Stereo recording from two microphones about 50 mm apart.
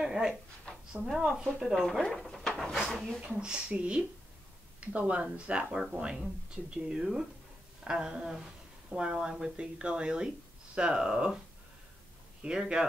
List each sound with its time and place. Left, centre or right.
0.0 s speech: centre
1.0 s speech: centre
1.8 s speech: centre
3.3 s speech: centre
12.4 s speech: centre